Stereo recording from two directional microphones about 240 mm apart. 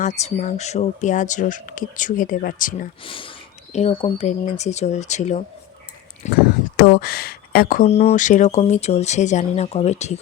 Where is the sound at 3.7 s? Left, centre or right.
Left.